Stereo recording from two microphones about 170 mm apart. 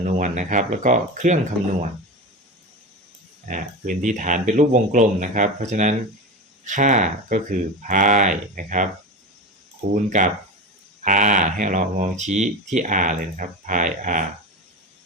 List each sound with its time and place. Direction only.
0.2 s speech: 45° right (ahead or behind)
3.5 s speech: 50° right (ahead or behind)
9.9 s speech: 50° right (ahead or behind)